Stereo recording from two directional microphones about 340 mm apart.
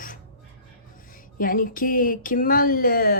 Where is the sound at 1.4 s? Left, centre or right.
Left.